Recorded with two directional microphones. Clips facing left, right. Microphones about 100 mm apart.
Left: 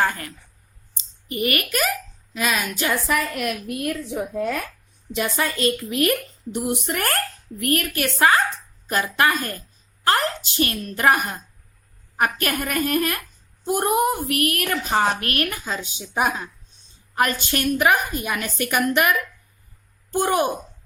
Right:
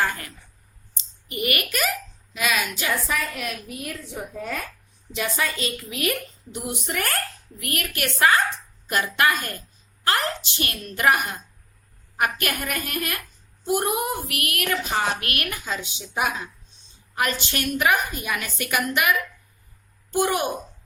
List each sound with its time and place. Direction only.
0.0 s a woman's voice: 35° left (ahead or behind)
1.3 s a woman's voice: 35° left (ahead or behind)
3.1 s a woman's voice: 60° left (ahead or behind)
5.1 s a woman's voice: 55° left (ahead or behind)
7.9 s a woman's voice: 30° left (ahead or behind)
20.1 s a woman's voice: 35° left (ahead or behind)